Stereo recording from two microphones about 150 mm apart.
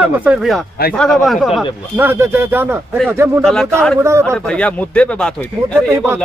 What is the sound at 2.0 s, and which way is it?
Speech, 15° right (ahead or behind).